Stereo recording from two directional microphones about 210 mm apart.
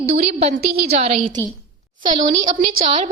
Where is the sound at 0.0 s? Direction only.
30° right (ahead or behind).